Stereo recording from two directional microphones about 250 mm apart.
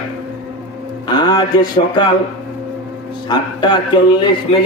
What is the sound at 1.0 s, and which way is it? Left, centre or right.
A man's voice, centre.